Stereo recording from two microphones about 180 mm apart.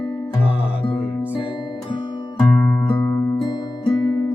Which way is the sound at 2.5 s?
10° left (ahead or behind).